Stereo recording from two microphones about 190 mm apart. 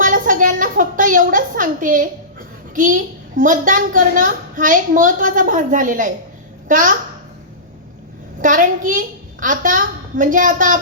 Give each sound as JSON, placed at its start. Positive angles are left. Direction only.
{"t": 0.0, "sound": "a woman's voice", "side_deg": -45}
{"t": 8.4, "sound": "a woman's voice", "side_deg": -45}